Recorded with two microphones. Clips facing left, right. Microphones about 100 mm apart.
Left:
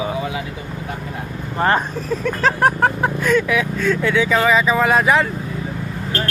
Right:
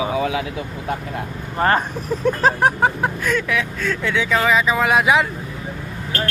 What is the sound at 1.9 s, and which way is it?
Speech, 15° right (ahead or behind).